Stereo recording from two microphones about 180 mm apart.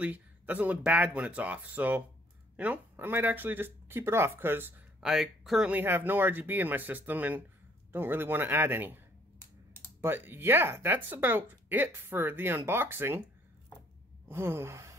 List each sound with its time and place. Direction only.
0.0 s speech: 10° right (ahead or behind)
10.0 s speech: 10° right (ahead or behind)
14.2 s gasp: 15° right (ahead or behind)